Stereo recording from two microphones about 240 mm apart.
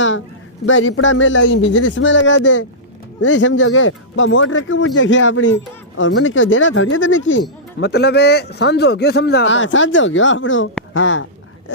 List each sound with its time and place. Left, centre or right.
0.6 s a man's voice: left